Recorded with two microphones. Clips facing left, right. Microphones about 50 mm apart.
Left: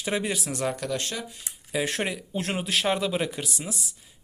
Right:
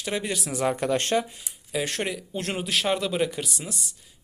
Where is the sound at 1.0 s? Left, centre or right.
Right.